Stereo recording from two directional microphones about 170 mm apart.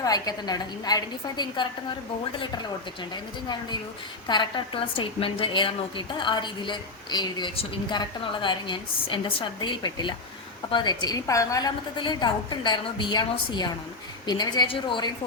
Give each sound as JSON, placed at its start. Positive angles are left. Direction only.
{"t": 0.0, "sound": "a woman's voice", "side_deg": 20}
{"t": 4.3, "sound": "a woman's voice", "side_deg": 30}